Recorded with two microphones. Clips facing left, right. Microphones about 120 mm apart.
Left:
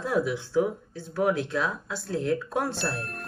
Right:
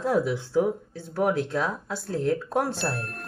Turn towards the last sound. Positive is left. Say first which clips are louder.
# right 2 dB
turn(degrees=0)  # may be behind; listen again after turning